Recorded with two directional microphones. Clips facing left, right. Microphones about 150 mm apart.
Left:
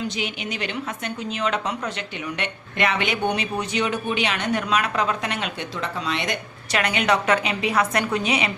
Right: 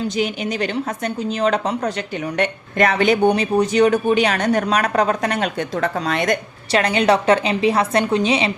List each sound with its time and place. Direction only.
0.2 s a woman's voice: 40° right (ahead or behind)
6.7 s a woman's voice: 35° right (ahead or behind)